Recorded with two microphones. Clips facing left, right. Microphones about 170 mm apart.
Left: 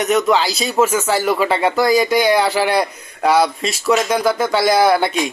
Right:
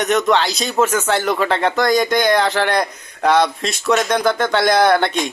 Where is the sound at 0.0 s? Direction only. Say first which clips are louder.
Left 1 dB; 5° left (ahead or behind).